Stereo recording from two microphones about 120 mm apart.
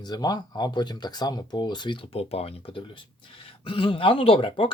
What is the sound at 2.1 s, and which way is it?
Speech, 60° left (ahead or behind).